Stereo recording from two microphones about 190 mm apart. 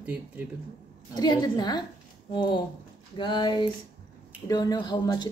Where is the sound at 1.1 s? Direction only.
20° left (ahead or behind).